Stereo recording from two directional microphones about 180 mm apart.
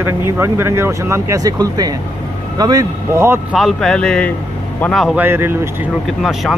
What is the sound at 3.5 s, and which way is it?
A man's voice, centre (ahead or behind).